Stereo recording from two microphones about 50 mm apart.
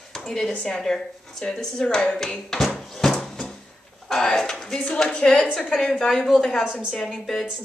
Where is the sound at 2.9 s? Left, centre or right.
Centre.